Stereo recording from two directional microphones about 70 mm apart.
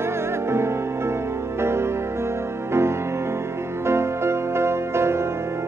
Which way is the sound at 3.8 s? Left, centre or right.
Right.